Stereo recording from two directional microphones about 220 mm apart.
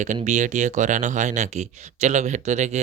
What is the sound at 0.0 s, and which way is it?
Speech, 35° right (ahead or behind).